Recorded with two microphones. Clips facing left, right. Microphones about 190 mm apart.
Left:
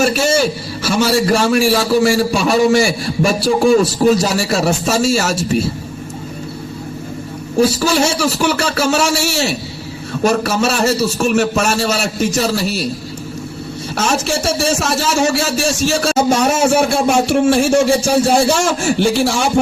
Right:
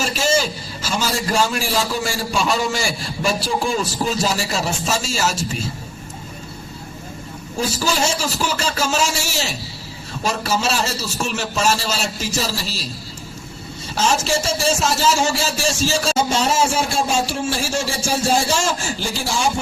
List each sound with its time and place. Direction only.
0.0 s a man's voice: 60° left (ahead or behind)
8.2 s a man's voice: 65° left (ahead or behind)
10.2 s a man's voice: 65° left (ahead or behind)
13.9 s a man's voice: 65° left (ahead or behind)